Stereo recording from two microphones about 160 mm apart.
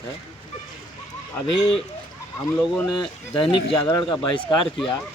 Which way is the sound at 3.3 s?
35° left (ahead or behind).